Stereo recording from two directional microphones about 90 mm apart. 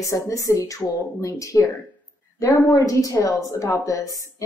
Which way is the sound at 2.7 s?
40° left (ahead or behind).